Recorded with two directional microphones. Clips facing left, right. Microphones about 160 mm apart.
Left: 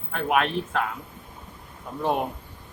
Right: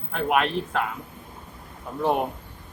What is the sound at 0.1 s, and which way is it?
Speech, centre (ahead or behind).